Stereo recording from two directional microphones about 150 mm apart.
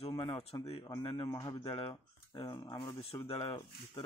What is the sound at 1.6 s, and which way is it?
Speech, 40° left (ahead or behind).